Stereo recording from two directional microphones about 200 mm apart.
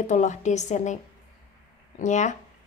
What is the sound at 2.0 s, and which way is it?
Speech, 35° left (ahead or behind).